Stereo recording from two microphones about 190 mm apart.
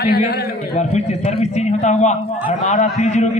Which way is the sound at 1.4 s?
35° left (ahead or behind).